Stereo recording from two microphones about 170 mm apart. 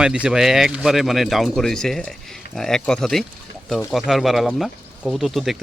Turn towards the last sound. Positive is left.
turn(degrees=0)  # may be behind; listen again after turning